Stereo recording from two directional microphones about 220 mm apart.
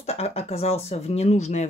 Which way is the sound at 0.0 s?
30° left (ahead or behind).